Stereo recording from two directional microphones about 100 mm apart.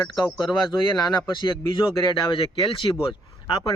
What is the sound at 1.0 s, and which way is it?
Speech, 50° left (ahead or behind).